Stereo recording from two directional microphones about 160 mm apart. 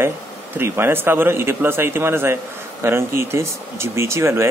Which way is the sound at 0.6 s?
15° right (ahead or behind).